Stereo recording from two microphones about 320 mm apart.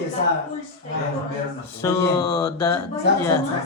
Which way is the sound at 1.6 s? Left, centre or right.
Centre.